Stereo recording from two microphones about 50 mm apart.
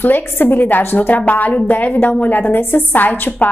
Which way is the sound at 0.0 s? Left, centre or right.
Left.